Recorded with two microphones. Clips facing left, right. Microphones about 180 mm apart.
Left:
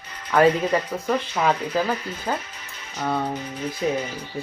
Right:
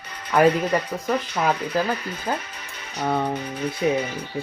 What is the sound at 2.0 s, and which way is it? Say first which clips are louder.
Music: even; 65° right (ahead or behind).